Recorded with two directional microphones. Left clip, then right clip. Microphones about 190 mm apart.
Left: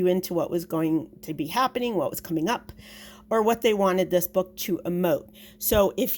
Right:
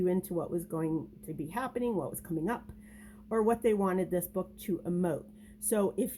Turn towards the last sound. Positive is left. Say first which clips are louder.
# left 9 dB
turn(degrees=25)  # may be behind; listen again after turning